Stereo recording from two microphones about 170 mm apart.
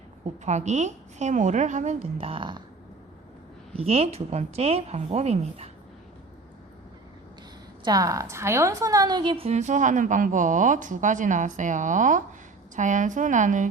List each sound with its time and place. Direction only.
0.4 s a woman's voice: 45° right (ahead or behind); by 2.6 s 25° right (ahead or behind)
3.8 s a woman's voice: 35° right (ahead or behind)
7.9 s a woman's voice: 20° right (ahead or behind); by 13.7 s 50° right (ahead or behind)